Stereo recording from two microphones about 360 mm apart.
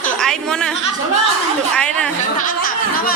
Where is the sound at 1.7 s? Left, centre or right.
Centre.